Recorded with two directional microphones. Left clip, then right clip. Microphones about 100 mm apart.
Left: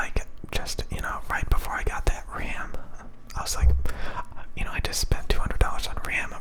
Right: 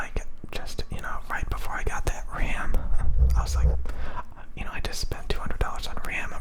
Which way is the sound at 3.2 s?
5° left (ahead or behind).